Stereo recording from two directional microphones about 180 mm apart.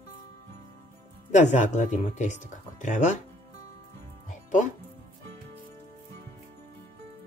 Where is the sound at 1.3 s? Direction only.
40° left (ahead or behind).